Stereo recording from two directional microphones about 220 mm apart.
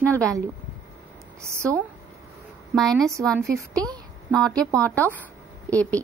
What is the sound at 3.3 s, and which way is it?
Speech, 15° right (ahead or behind).